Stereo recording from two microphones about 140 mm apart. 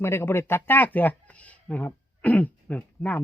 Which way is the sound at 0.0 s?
15° left (ahead or behind).